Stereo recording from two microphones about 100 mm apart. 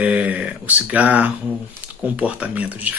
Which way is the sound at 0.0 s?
15° right (ahead or behind).